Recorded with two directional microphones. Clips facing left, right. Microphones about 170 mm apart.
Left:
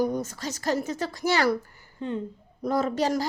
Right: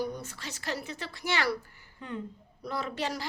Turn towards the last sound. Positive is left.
turn(degrees=40)  # may be behind; listen again after turning